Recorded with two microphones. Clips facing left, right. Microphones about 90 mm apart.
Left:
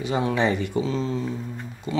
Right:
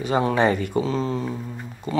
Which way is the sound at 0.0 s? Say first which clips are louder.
Right 3 dB; 45° right (ahead or behind).